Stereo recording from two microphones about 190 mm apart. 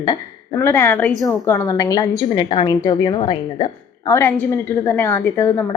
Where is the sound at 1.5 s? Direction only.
15° left (ahead or behind).